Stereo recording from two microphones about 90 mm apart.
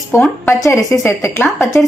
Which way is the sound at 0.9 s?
35° left (ahead or behind).